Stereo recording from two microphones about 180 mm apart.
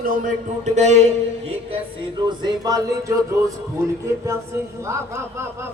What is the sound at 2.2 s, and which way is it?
A man's voice, 20° right (ahead or behind).